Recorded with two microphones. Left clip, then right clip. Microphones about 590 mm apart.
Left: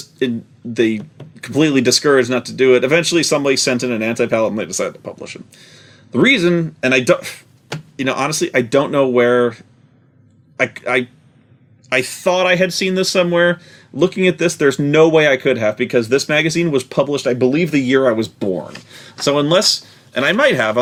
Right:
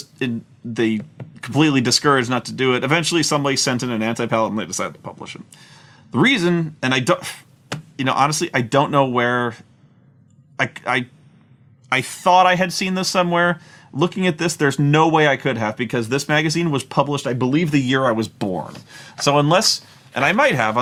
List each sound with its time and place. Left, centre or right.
0.7 s speech: right
10.6 s speech: right